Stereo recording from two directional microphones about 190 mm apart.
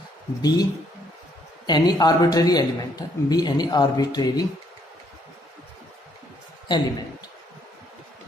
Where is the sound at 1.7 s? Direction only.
20° left (ahead or behind).